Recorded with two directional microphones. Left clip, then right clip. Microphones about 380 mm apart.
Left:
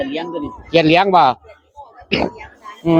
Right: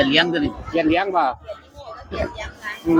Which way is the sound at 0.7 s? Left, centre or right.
Left.